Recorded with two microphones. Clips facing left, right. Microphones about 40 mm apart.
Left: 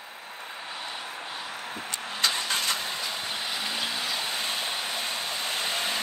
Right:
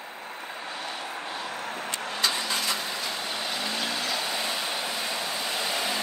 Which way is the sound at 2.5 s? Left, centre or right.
Left.